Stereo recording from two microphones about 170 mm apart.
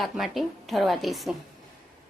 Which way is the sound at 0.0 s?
Centre (ahead or behind).